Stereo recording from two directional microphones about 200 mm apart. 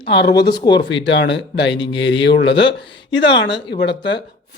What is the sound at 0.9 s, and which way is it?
Speech, 65° left (ahead or behind).